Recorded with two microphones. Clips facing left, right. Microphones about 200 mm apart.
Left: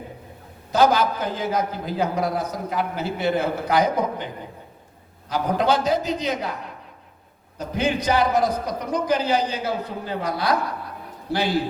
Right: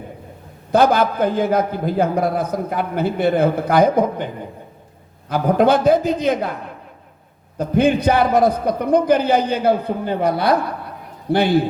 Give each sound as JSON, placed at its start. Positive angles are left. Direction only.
{"t": 0.7, "sound": "a man's voice", "side_deg": -55}
{"t": 5.3, "sound": "a man's voice", "side_deg": -55}
{"t": 7.6, "sound": "a man's voice", "side_deg": -55}